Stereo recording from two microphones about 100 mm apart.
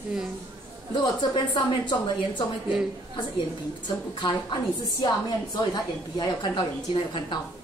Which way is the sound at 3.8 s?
50° left (ahead or behind).